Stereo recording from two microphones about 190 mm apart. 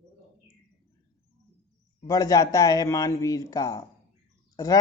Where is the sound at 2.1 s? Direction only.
20° left (ahead or behind).